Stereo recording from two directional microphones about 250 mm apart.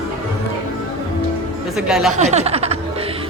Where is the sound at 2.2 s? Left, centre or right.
Right.